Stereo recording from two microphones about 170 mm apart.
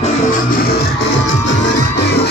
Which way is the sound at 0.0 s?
50° left (ahead or behind).